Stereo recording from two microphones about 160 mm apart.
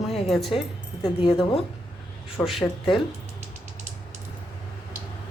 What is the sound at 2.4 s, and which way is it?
Speech, centre (ahead or behind).